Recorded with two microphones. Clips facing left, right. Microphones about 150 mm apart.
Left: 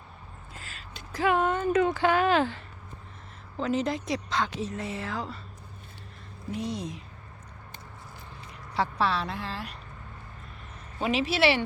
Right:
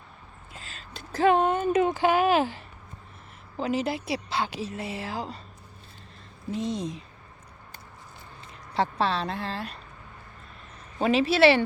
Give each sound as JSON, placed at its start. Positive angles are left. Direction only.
{"t": 0.9, "sound": "a sound", "side_deg": -30}
{"t": 3.6, "sound": "a woman's voice", "side_deg": -10}
{"t": 6.5, "sound": "a woman's voice", "side_deg": -25}
{"t": 8.7, "sound": "a woman's voice", "side_deg": -25}
{"t": 11.0, "sound": "speech", "side_deg": -30}